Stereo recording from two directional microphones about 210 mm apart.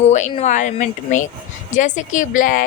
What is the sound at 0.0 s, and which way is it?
A woman's voice, 35° left (ahead or behind).